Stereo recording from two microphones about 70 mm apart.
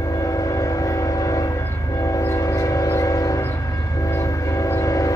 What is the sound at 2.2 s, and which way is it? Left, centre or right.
Train, left.